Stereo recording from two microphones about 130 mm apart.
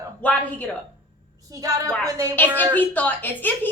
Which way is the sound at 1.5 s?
25° right (ahead or behind).